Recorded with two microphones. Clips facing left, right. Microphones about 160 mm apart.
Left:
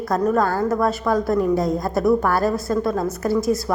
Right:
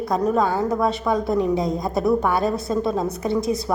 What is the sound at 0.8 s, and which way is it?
Speech, centre (ahead or behind).